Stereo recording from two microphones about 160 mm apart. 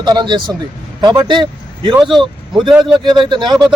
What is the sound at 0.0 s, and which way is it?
A man's voice, 25° right (ahead or behind).